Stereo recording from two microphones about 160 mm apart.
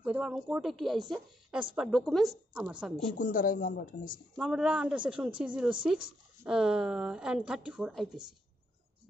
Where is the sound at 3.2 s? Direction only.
60° left (ahead or behind).